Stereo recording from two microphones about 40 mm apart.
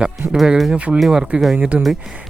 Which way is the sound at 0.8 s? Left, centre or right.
Right.